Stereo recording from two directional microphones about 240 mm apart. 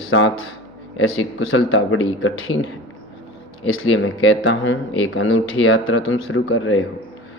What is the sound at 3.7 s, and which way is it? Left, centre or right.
Speech, left.